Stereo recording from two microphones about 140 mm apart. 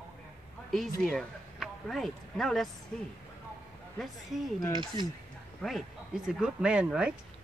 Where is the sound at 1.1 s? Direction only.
5° left (ahead or behind).